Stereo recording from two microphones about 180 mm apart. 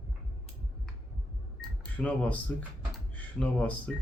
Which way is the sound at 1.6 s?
5° left (ahead or behind).